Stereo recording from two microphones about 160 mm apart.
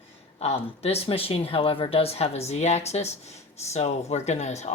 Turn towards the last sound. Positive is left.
turn(degrees=45)  # may be behind; listen again after turning